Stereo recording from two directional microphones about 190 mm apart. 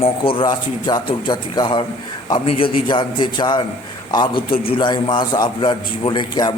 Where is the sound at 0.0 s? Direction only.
25° left (ahead or behind).